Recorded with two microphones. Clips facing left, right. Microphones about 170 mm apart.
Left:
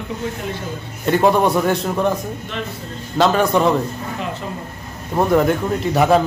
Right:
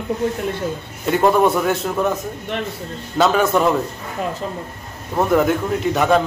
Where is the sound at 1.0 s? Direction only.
Centre (ahead or behind).